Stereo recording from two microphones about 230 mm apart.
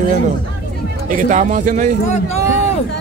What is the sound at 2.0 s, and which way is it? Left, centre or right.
Speech, left.